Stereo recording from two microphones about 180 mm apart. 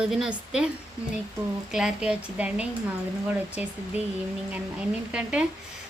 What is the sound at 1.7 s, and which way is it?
A woman's voice, 5° right (ahead or behind).